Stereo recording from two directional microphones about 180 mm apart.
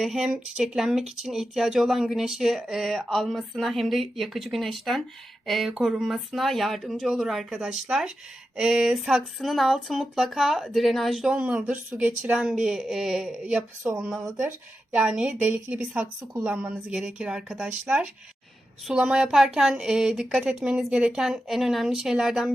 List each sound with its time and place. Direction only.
0.0 s a woman's voice: centre (ahead or behind)
14.2 s a woman's voice: 15° right (ahead or behind)
14.9 s a woman's voice: 5° right (ahead or behind)